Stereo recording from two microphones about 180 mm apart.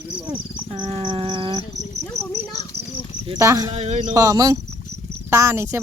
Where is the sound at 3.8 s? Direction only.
40° right (ahead or behind).